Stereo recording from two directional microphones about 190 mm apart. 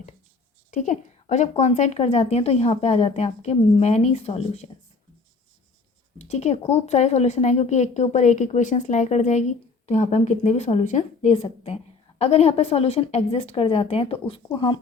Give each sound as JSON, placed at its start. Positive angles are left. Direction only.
{"t": 0.7, "sound": "a woman's voice", "side_deg": 40}
{"t": 6.1, "sound": "a woman's voice", "side_deg": 35}